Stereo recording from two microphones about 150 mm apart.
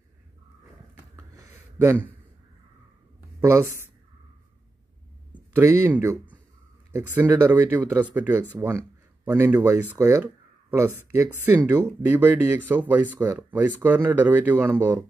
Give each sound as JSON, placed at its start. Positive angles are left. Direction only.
{"t": 1.1, "sound": "a sound", "side_deg": -20}
{"t": 3.3, "sound": "speech", "side_deg": -20}
{"t": 5.3, "sound": "speech", "side_deg": -15}